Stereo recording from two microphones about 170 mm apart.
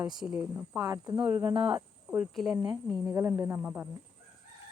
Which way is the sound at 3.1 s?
15° right (ahead or behind).